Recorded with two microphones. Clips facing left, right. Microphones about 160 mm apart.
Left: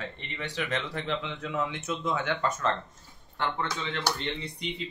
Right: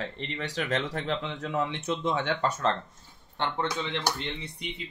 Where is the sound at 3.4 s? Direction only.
20° right (ahead or behind).